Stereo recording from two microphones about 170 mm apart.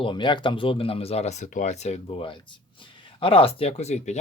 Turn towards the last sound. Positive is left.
turn(degrees=40)  # may be behind; listen again after turning